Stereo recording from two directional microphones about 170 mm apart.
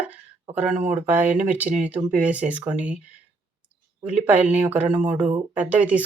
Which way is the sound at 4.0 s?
10° right (ahead or behind).